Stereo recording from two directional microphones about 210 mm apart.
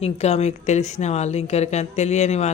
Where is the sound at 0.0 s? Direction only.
30° left (ahead or behind).